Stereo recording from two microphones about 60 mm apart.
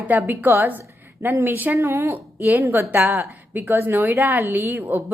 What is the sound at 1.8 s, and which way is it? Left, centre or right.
A woman's voice, right.